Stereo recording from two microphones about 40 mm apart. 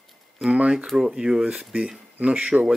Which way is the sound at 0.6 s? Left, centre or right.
Right.